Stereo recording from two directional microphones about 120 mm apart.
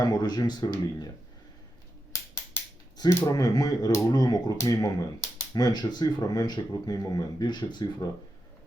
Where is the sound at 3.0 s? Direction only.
30° left (ahead or behind).